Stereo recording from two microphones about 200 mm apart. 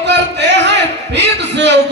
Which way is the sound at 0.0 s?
60° right (ahead or behind).